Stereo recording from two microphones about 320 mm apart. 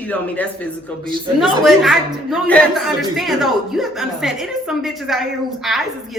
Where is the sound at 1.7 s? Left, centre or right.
Centre.